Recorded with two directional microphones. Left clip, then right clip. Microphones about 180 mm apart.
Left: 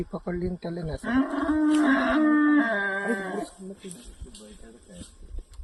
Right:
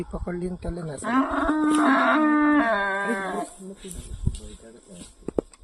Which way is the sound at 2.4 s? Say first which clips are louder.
Right 2 dB; 20° left (ahead or behind).